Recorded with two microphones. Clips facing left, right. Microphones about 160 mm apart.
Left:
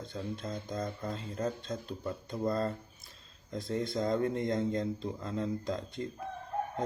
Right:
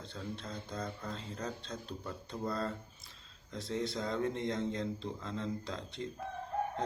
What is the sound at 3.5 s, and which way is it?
Speech, 45° left (ahead or behind).